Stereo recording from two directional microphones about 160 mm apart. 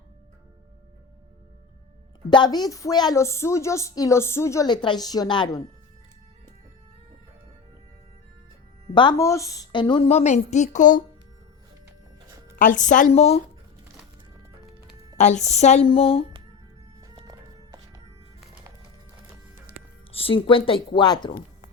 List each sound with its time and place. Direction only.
2.3 s a woman's voice: 25° left (ahead or behind)
9.0 s a woman's voice: 25° left (ahead or behind); by 11.0 s 55° left (ahead or behind)
12.5 s a woman's voice: 55° left (ahead or behind)
15.2 s a woman's voice: 45° left (ahead or behind)
17.2 s music: 20° right (ahead or behind)
20.1 s a woman's voice: 35° left (ahead or behind)